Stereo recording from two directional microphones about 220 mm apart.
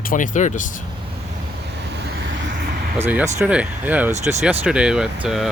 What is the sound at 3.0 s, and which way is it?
Speech, 10° right (ahead or behind).